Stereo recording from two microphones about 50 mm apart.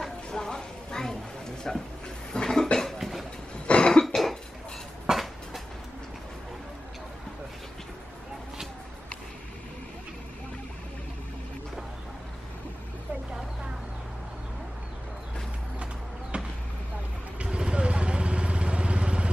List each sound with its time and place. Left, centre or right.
0.0 s a sound: centre
1.7 s speech: centre
2.3 s cough: centre
3.0 s a sound: centre
3.5 s cough: left
4.0 s cough: centre
5.0 s train: centre
15.8 s a sound: right
17.4 s vehicle: centre